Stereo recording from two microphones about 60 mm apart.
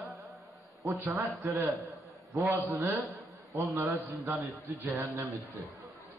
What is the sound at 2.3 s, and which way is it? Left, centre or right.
A man's voice, right.